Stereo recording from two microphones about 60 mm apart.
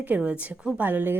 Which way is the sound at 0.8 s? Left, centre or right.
Right.